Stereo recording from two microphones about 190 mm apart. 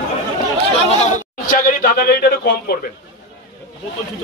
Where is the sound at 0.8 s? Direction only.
35° left (ahead or behind); by 2.9 s 55° left (ahead or behind).